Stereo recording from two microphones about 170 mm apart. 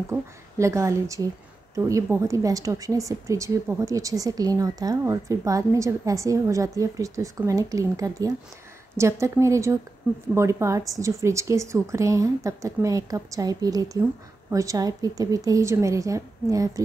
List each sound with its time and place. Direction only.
0.1 s speech: 15° right (ahead or behind)